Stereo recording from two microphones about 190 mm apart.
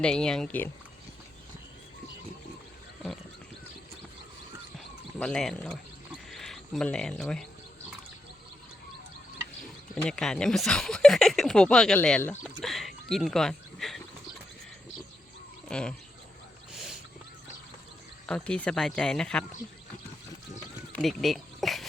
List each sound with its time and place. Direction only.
0.0 s speech: 5° left (ahead or behind)
5.2 s speech: 5° left (ahead or behind)
9.9 s speech: 5° left (ahead or behind)
12.6 s a sound: centre (ahead or behind)
15.7 s speech: 5° left (ahead or behind)
18.3 s speech: 5° left (ahead or behind)
20.9 s a sound: centre (ahead or behind)